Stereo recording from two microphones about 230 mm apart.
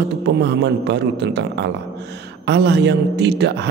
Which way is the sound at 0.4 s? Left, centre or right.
Right.